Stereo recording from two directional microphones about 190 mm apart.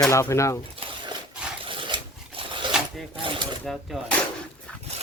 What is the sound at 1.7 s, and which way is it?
Zipper, 25° right (ahead or behind).